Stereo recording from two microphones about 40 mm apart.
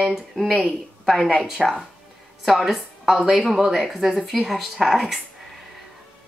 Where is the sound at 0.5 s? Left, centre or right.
Centre.